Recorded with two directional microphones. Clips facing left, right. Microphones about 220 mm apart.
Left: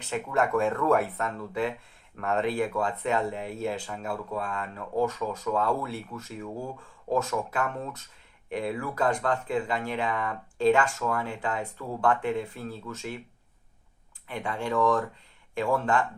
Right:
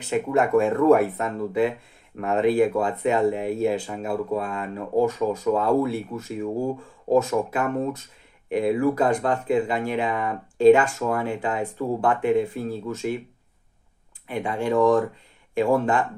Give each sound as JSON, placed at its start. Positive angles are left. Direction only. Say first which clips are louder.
{"t": 0.1, "sound": "speech", "louder": "right 6 dB", "side_deg": -15}
{"t": 14.3, "sound": "speech", "louder": "right 6 dB", "side_deg": -15}